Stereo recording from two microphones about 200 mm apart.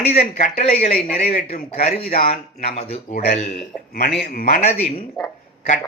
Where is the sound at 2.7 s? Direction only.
30° left (ahead or behind).